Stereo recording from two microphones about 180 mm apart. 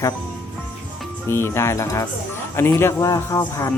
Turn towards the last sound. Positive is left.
turn(degrees=20)  # may be behind; listen again after turning